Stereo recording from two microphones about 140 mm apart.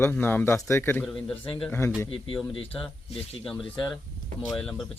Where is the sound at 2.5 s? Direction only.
45° left (ahead or behind).